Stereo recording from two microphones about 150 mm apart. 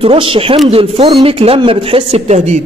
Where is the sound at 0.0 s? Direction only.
40° right (ahead or behind).